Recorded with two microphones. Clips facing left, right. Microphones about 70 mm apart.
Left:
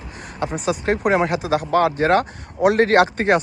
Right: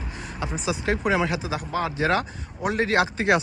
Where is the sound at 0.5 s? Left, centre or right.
Left.